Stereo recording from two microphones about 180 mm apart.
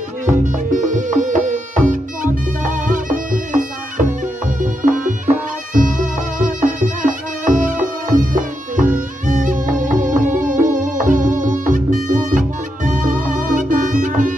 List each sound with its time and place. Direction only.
0.4 s music: 45° right (ahead or behind)